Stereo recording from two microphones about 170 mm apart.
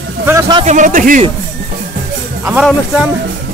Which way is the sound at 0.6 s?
50° right (ahead or behind).